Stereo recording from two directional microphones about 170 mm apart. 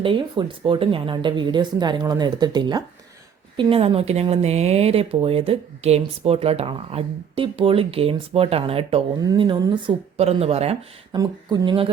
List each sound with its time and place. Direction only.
0.0 s speech: 30° right (ahead or behind)
3.6 s speech: 35° right (ahead or behind)
9.1 s speech: 25° right (ahead or behind)
10.2 s speech: 35° right (ahead or behind)
11.1 s speech: 25° right (ahead or behind)